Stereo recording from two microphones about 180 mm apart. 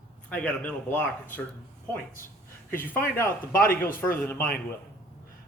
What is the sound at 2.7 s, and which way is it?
Speech, 10° left (ahead or behind).